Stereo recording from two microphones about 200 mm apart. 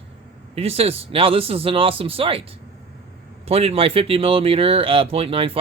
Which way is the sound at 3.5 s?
30° right (ahead or behind).